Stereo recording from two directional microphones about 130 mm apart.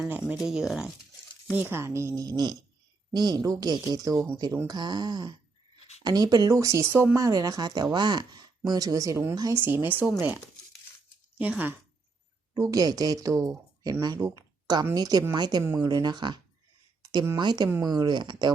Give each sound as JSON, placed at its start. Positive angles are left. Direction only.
{"t": 0.3, "sound": "speech", "side_deg": -5}
{"t": 1.5, "sound": "speech", "side_deg": -15}
{"t": 12.5, "sound": "speech", "side_deg": -25}
{"t": 17.0, "sound": "a sound", "side_deg": -30}
{"t": 17.3, "sound": "speech", "side_deg": -35}